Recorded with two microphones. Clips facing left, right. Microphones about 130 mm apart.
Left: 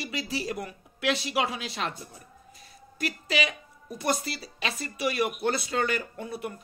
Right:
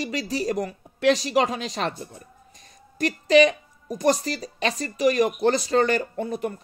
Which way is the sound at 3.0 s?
40° right (ahead or behind).